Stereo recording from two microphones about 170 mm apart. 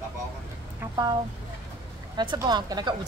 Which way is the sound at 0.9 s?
25° right (ahead or behind).